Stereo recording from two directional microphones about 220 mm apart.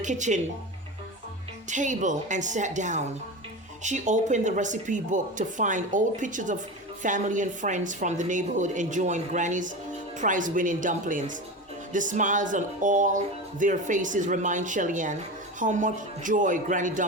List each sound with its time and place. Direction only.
0.0 s speech: 35° right (ahead or behind)
1.7 s speech: 35° right (ahead or behind)